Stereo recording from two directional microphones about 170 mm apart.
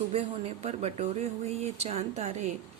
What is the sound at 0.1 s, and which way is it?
Speech, 40° right (ahead or behind).